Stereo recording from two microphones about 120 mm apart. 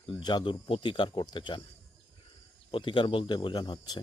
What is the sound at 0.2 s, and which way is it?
Speech, 35° left (ahead or behind).